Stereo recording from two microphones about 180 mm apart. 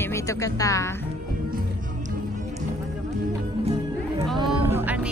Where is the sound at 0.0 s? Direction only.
15° left (ahead or behind).